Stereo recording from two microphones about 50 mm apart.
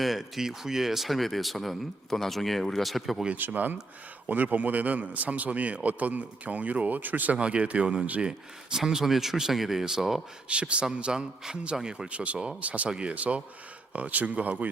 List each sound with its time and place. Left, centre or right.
0.0 s speech: centre
3.3 s a man's voice: right
7.3 s a man's voice: right
8.2 s speech: centre
10.5 s a man's voice: right